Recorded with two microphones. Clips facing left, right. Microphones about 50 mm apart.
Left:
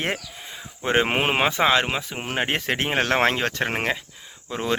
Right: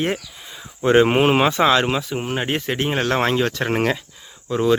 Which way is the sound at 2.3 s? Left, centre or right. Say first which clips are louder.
Even; left.